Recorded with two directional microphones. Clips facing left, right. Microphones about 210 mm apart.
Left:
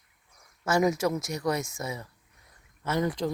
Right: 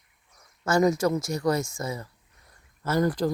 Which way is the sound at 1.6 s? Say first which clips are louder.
Right 3 dB; 20° left (ahead or behind).